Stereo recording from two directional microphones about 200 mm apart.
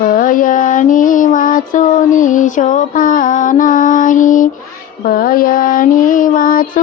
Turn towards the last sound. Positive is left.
turn(degrees=45)  # may be behind; listen again after turning